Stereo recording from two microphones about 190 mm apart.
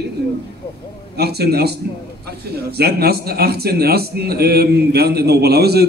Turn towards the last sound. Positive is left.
turn(degrees=-55)  # may be behind; listen again after turning